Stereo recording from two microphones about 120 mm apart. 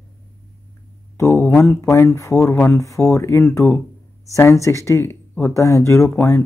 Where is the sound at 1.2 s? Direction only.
25° left (ahead or behind).